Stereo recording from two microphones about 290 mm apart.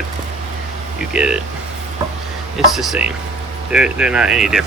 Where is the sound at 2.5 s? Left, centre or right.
Centre.